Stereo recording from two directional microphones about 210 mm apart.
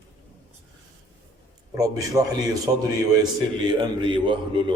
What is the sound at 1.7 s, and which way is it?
Speech, 15° right (ahead or behind).